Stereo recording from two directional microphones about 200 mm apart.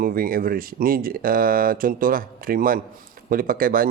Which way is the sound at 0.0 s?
45° right (ahead or behind).